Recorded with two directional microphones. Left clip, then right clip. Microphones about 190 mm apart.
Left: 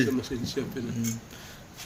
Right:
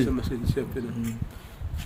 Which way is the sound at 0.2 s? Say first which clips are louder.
Right 1 dB; 60° right (ahead or behind).